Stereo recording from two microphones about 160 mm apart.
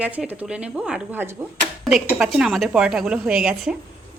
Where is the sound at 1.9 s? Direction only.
Centre (ahead or behind).